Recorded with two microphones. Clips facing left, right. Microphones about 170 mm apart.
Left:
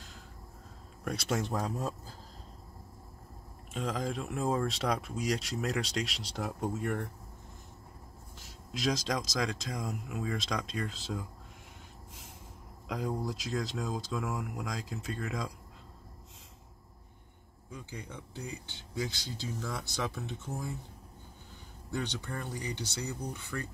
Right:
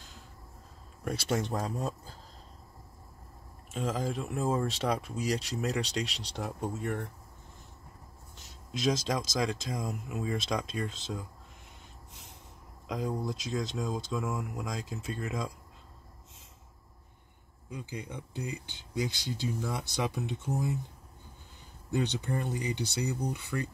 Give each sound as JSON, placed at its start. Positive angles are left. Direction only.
{"t": 1.0, "sound": "speech", "side_deg": 0}
{"t": 3.7, "sound": "speech", "side_deg": 0}
{"t": 8.7, "sound": "speech", "side_deg": 0}
{"t": 12.8, "sound": "speech", "side_deg": 0}
{"t": 17.6, "sound": "speech", "side_deg": -15}
{"t": 21.9, "sound": "speech", "side_deg": -20}